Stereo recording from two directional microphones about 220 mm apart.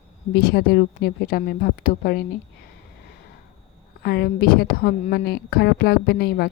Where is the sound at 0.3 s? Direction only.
45° left (ahead or behind).